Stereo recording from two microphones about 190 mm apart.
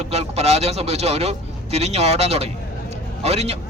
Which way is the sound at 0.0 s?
35° right (ahead or behind).